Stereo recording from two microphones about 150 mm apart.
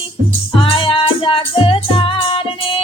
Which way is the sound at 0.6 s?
35° left (ahead or behind).